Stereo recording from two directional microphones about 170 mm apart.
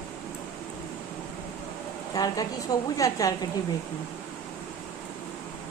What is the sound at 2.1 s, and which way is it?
A woman's voice, 20° left (ahead or behind).